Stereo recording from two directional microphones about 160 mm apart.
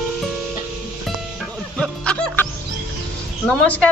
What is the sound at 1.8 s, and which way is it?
Music, 5° left (ahead or behind).